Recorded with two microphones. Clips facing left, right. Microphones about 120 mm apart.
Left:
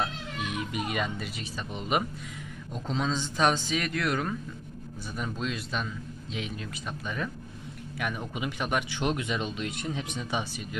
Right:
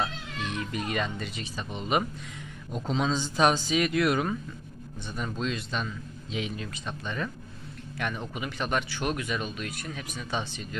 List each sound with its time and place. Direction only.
0.0 s speech: 10° left (ahead or behind); by 4.4 s 10° right (ahead or behind)
5.1 s a man's voice: 5° left (ahead or behind); by 10.4 s 20° left (ahead or behind)